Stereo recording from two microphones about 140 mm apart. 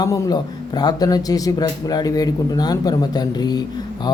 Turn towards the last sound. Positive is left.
turn(degrees=30)  # may be behind; listen again after turning